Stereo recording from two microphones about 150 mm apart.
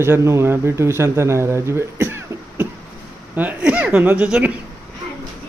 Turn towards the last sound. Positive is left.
turn(degrees=-10)  # may be behind; listen again after turning